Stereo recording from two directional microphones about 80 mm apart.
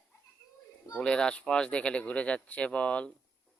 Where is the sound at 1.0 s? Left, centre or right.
Centre.